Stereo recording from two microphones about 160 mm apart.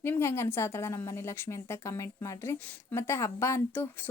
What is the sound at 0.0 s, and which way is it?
A woman's voice, 15° left (ahead or behind).